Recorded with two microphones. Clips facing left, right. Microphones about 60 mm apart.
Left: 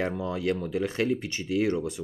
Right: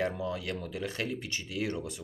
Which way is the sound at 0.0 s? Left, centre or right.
Left.